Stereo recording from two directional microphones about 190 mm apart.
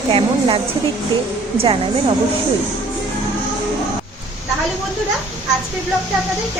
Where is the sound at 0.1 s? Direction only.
30° right (ahead or behind).